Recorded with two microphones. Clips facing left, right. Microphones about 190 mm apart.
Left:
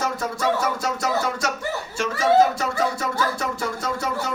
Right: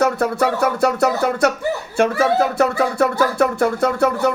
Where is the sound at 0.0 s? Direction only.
65° right (ahead or behind).